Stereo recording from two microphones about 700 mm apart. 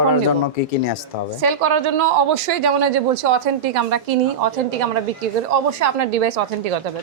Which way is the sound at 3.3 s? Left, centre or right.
Right.